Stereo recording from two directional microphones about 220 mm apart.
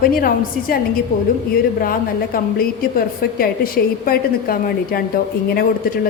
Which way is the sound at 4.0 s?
40° left (ahead or behind).